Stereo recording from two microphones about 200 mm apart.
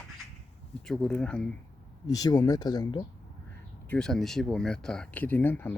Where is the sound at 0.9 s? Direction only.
5° left (ahead or behind).